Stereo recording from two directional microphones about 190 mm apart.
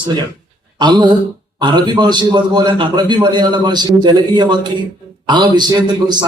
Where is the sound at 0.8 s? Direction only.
25° right (ahead or behind).